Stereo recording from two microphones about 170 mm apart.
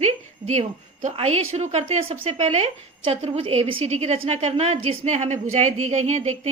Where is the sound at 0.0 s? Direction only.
40° right (ahead or behind).